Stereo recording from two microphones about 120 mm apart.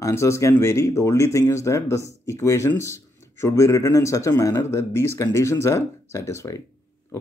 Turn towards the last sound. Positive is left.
turn(degrees=25)  # may be behind; listen again after turning